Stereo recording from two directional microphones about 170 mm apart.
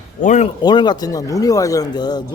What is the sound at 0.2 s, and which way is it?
Speech, 45° left (ahead or behind).